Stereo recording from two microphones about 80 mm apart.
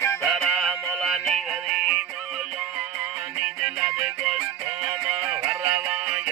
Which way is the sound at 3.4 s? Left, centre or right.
Centre.